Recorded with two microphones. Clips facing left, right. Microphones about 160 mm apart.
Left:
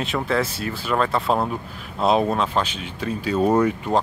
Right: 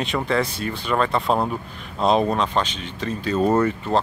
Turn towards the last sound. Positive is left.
turn(degrees=10)  # may be behind; listen again after turning